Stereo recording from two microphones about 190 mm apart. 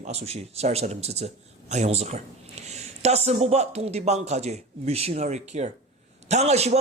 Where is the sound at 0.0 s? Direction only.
35° right (ahead or behind).